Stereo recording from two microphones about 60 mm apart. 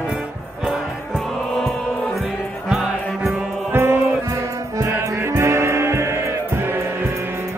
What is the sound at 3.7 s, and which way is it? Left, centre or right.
Music, right.